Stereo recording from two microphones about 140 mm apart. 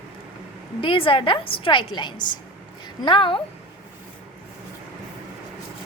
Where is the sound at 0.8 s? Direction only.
40° left (ahead or behind).